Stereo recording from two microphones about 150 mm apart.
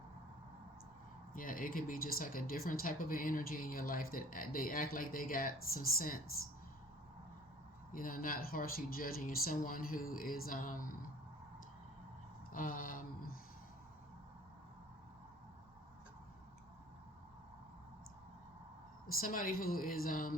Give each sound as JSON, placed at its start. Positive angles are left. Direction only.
{"t": 1.3, "sound": "speech", "side_deg": 65}
{"t": 7.9, "sound": "speech", "side_deg": 70}
{"t": 12.5, "sound": "a sound", "side_deg": 65}
{"t": 19.2, "sound": "speech", "side_deg": 65}